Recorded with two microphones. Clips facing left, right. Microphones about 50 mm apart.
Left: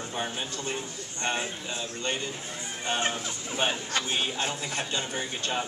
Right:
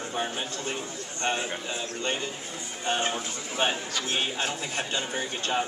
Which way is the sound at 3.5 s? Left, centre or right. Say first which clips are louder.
Even; centre.